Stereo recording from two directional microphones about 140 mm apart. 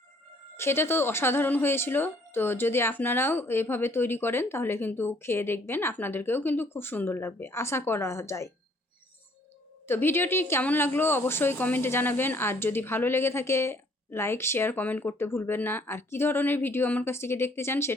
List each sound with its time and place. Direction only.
0.5 s speech: 15° left (ahead or behind)
9.8 s speech: 15° left (ahead or behind)